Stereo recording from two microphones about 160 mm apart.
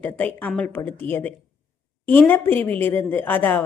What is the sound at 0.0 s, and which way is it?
A woman's voice, 10° left (ahead or behind).